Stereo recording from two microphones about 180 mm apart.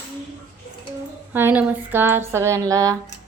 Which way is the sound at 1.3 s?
10° right (ahead or behind).